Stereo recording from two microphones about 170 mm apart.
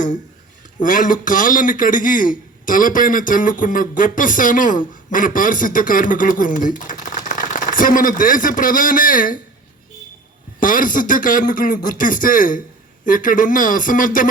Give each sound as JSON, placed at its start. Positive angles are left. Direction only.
{"t": 0.8, "sound": "a man's voice", "side_deg": 50}
{"t": 10.6, "sound": "a man's voice", "side_deg": 55}